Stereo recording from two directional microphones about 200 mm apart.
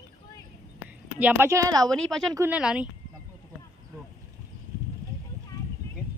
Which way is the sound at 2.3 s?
15° right (ahead or behind).